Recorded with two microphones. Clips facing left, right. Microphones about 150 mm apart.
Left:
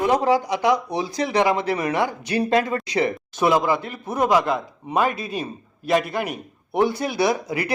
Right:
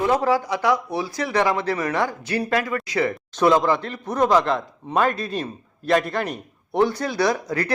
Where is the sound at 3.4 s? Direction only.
10° left (ahead or behind).